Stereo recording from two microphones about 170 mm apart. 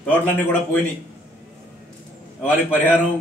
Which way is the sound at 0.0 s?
10° left (ahead or behind).